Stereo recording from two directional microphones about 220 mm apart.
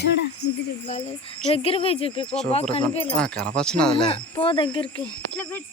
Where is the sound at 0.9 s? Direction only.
30° left (ahead or behind).